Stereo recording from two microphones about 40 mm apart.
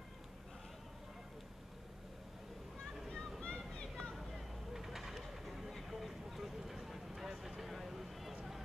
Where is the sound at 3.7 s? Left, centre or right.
Centre.